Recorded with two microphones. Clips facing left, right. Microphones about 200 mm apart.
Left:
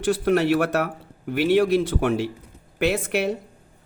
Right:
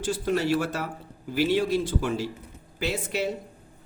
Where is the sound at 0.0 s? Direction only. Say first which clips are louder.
Left 6 dB; 60° left (ahead or behind).